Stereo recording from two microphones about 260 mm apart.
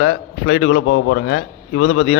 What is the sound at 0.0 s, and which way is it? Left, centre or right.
A man's voice, left.